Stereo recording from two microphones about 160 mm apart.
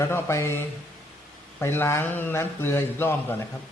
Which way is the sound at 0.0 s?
15° left (ahead or behind).